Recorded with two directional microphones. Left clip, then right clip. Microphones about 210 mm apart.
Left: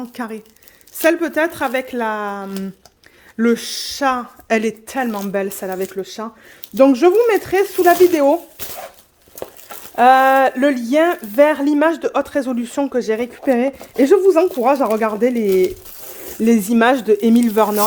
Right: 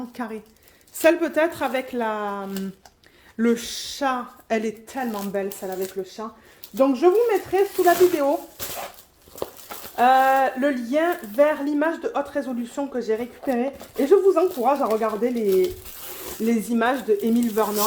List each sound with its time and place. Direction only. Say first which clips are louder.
0.2 s a woman's voice: left 5 dB; 35° left (ahead or behind)
1.0 s a woman's voice: left 3 dB; 25° left (ahead or behind); by 8.4 s 65° left (ahead or behind)
9.4 s a sound: left 1 dB; 10° left (ahead or behind)
9.9 s speech: left 6 dB; 60° left (ahead or behind)
16.5 s speech: left 8 dB; 65° left (ahead or behind)